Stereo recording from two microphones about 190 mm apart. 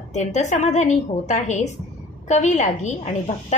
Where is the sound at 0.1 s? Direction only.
40° left (ahead or behind).